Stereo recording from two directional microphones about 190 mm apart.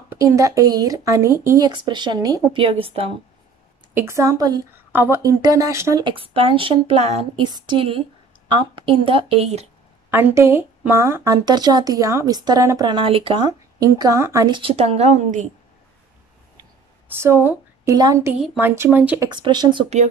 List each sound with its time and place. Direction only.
0.1 s speech: 15° right (ahead or behind)
3.9 s a woman's voice: 15° right (ahead or behind); by 9.7 s 35° right (ahead or behind)
10.1 s speech: 15° right (ahead or behind); by 15.4 s 35° right (ahead or behind)
17.2 s speech: 15° right (ahead or behind)
18.4 s speech: centre (ahead or behind)
19.2 s speech: 20° right (ahead or behind)